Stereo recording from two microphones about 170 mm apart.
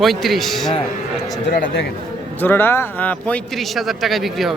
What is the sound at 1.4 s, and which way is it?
Speech, 60° left (ahead or behind).